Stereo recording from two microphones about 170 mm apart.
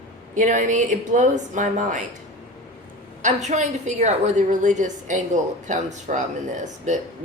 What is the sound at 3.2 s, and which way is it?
A woman's voice, 45° right (ahead or behind).